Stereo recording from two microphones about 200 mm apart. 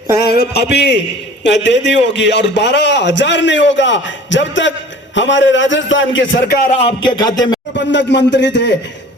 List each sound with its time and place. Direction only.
0.3 s a man's voice: 55° left (ahead or behind)
6.5 s speech: 45° left (ahead or behind)
6.7 s a sound: 25° left (ahead or behind)
7.8 s a man's voice: 60° left (ahead or behind)